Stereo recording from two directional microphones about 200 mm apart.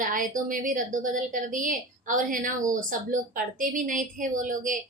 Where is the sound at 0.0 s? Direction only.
40° right (ahead or behind).